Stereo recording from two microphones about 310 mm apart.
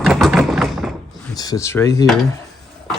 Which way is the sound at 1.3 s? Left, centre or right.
Centre.